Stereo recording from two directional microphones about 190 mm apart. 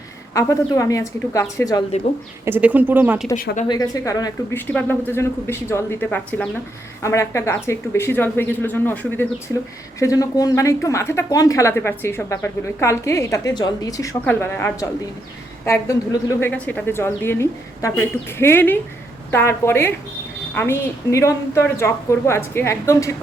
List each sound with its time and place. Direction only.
0.3 s speech: 15° left (ahead or behind)
2.4 s speech: 10° right (ahead or behind)
3.3 s speech: 45° left (ahead or behind)
3.7 s speech: 20° left (ahead or behind)